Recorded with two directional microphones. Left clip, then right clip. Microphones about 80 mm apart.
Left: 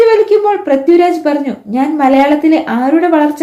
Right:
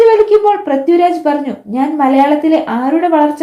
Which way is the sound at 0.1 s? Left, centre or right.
Right.